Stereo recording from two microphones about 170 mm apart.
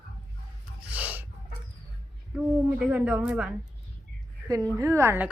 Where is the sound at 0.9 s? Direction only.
10° right (ahead or behind).